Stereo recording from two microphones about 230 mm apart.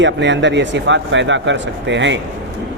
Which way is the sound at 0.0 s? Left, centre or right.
Right.